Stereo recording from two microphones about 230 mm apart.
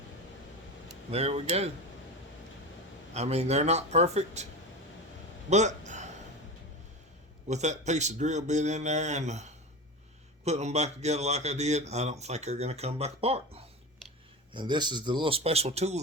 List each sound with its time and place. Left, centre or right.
1.1 s speech: right
3.2 s speech: right
5.5 s a man's voice: right
7.4 s a man's voice: right